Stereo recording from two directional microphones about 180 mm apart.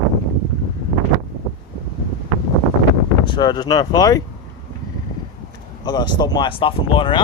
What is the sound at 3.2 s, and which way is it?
Speech, 25° left (ahead or behind).